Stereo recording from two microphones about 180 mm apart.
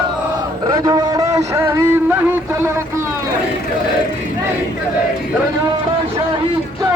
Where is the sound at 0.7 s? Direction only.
20° right (ahead or behind).